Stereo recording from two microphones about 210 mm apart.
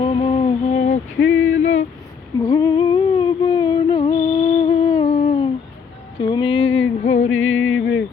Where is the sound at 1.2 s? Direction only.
70° left (ahead or behind).